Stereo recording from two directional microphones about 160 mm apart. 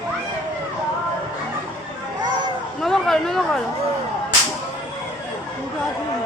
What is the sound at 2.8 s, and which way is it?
Speech, centre (ahead or behind).